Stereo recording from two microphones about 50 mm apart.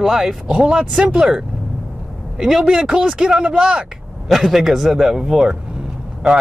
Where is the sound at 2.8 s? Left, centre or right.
Centre.